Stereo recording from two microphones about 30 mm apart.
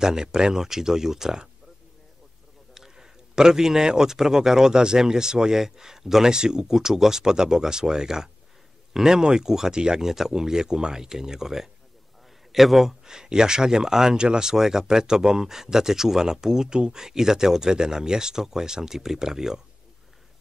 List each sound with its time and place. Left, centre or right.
0.0 s speech: right
2.7 s speech: centre
6.3 s speech: right
10.0 s speech: centre
12.5 s a man's voice: centre
13.0 s speech: right